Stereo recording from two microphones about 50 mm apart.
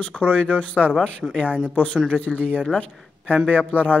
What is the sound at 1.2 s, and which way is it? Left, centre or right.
Speech, centre.